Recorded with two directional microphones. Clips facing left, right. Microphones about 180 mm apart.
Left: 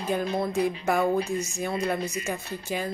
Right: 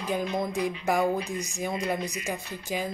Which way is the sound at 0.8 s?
15° right (ahead or behind).